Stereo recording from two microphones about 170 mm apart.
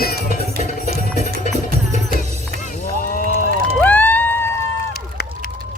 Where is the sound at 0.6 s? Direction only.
40° right (ahead or behind).